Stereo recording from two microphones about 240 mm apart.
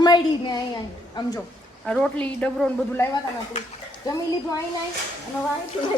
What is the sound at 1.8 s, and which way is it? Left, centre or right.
A woman's voice, centre.